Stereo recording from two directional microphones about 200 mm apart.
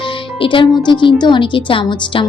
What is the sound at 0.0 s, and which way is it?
Speech, 25° left (ahead or behind).